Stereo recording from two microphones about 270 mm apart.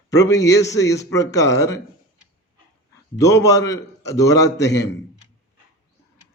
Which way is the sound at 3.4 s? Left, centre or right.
Centre.